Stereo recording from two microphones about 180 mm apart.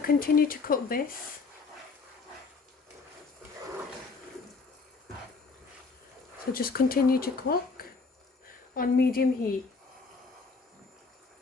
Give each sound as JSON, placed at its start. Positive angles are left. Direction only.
{"t": 0.0, "sound": "speech", "side_deg": 55}
{"t": 6.5, "sound": "speech", "side_deg": 55}